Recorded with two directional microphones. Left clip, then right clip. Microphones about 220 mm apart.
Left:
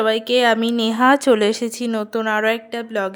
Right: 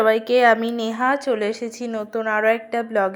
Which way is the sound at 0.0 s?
15° left (ahead or behind).